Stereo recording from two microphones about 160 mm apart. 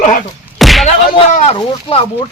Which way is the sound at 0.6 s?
Centre (ahead or behind).